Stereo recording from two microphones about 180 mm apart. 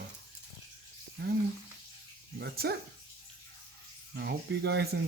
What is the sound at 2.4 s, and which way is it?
Speech, 60° right (ahead or behind).